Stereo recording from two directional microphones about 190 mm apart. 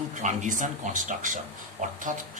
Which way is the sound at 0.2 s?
40° right (ahead or behind).